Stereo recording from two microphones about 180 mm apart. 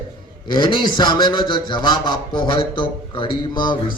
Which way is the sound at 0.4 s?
25° left (ahead or behind).